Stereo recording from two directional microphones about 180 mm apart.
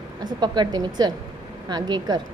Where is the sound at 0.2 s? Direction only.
25° right (ahead or behind).